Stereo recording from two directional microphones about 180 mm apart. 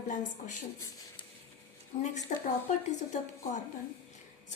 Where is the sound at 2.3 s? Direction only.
40° left (ahead or behind).